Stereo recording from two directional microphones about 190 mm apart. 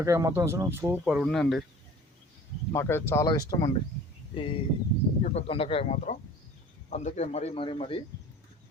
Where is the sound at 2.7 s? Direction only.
15° left (ahead or behind).